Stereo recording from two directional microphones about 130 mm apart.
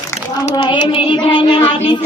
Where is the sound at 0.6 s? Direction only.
40° left (ahead or behind).